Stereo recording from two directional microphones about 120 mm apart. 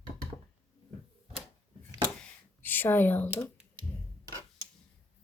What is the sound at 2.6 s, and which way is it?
Speech, 15° left (ahead or behind).